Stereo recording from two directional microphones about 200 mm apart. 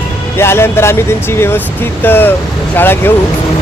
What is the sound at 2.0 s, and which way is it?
Speech, 10° left (ahead or behind).